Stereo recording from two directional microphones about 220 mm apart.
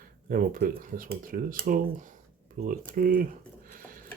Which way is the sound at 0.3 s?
40° right (ahead or behind).